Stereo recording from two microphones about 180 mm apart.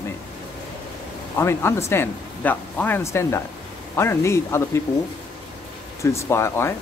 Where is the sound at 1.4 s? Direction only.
15° left (ahead or behind).